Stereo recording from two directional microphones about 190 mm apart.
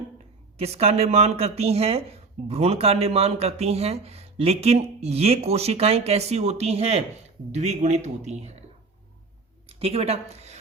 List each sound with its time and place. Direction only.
0.6 s speech: 35° right (ahead or behind)
9.8 s speech: 35° right (ahead or behind)